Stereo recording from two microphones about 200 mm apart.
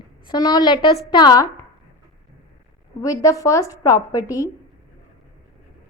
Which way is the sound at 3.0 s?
20° left (ahead or behind).